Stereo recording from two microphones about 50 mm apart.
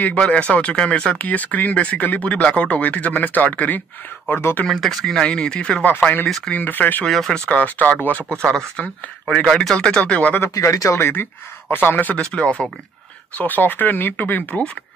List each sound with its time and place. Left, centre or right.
0.2 s speech: left
1.1 s speech: left
4.3 s speech: left
4.6 s speech: centre
4.9 s speech: centre
5.3 s speech: left
5.9 s speech: left
7.1 s speech: centre
7.3 s speech: left
8.5 s speech: left
9.3 s speech: centre
10.4 s speech: left
12.2 s speech: left
13.4 s speech: left